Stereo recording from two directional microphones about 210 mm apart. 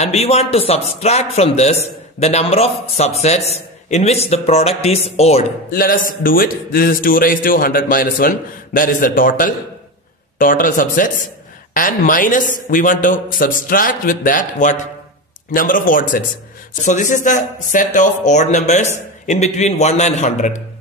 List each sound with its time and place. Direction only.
0.0 s a man's voice: 30° left (ahead or behind)
5.7 s a man's voice: 45° left (ahead or behind)